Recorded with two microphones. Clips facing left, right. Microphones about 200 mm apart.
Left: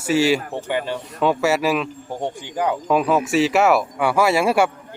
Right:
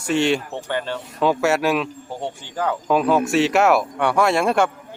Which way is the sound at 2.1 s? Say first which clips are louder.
Left 3 dB; 15° left (ahead or behind).